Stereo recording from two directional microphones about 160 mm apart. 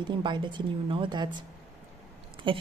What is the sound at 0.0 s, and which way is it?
A woman's voice, 30° right (ahead or behind).